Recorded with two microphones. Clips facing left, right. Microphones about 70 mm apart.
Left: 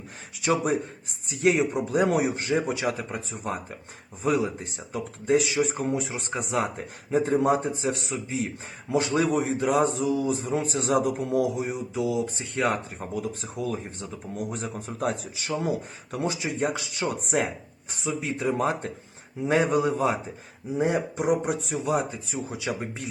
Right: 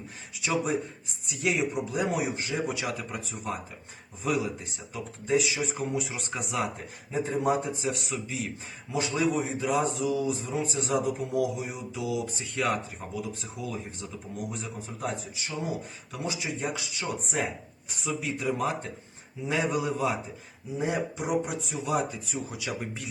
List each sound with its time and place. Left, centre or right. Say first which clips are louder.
0.4 s a man's voice: left 4 dB; left
2.0 s a man's voice: left 5 dB; left
2.6 s a man's voice: left 4 dB; left
5.9 s speech: left 3 dB; left
7.1 s speech: left 5 dB; left
8.9 s a man's voice: left 4 dB; left
16.1 s a man's voice: left 5 dB; left
18.0 s a man's voice: left 3 dB; left